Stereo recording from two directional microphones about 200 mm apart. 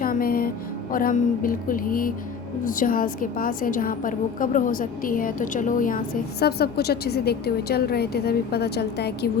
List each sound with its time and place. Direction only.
0.0 s a woman's voice: 45° left (ahead or behind)
6.4 s a woman's voice: 55° left (ahead or behind)